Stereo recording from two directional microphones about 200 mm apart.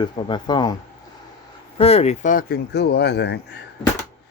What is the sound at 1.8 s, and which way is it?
Speech, 30° left (ahead or behind).